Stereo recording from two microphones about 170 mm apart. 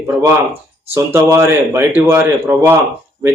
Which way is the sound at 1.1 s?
15° right (ahead or behind).